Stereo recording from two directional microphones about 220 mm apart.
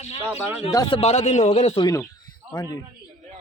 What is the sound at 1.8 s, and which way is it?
Speech, 15° left (ahead or behind).